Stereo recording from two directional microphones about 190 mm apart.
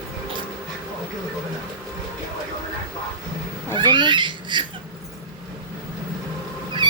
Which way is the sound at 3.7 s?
25° right (ahead or behind).